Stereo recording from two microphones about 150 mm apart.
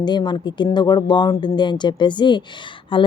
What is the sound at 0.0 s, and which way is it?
A woman's voice, 30° left (ahead or behind).